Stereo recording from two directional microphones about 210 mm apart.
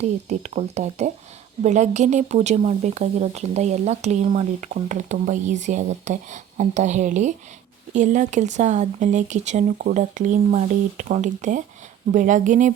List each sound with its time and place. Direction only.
0.0 s speech: 30° right (ahead or behind)